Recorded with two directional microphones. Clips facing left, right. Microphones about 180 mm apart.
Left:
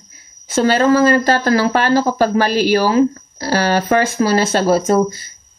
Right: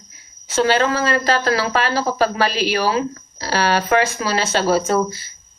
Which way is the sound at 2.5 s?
45° left (ahead or behind).